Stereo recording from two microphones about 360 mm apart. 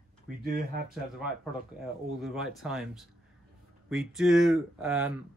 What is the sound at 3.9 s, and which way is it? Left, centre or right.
Speech, centre.